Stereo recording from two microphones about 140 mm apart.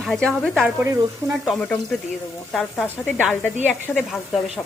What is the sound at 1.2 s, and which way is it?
Speech, 20° right (ahead or behind).